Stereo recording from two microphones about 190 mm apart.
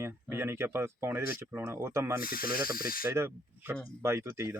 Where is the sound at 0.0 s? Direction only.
10° right (ahead or behind).